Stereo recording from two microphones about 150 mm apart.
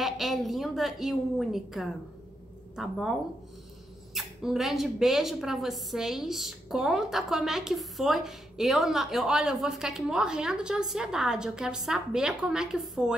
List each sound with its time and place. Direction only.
0.0 s speech: centre (ahead or behind)